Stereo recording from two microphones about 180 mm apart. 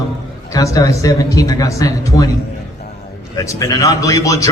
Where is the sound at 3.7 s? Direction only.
20° left (ahead or behind).